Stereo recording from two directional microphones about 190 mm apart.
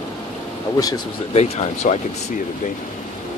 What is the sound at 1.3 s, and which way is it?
Speech, 35° left (ahead or behind).